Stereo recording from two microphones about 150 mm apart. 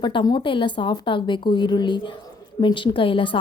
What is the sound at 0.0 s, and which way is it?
A woman's voice, 30° left (ahead or behind).